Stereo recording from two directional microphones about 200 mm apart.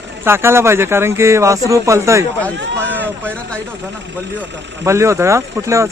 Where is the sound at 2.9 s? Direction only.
10° right (ahead or behind).